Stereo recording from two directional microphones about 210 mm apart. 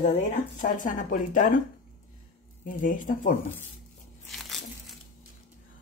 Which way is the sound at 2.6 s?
40° left (ahead or behind).